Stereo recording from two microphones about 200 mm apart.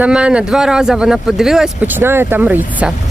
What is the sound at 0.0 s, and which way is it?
Speech, 5° right (ahead or behind).